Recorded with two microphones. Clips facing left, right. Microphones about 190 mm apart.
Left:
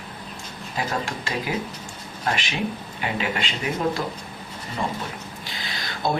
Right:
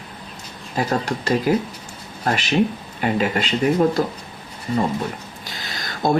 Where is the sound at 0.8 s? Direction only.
40° right (ahead or behind).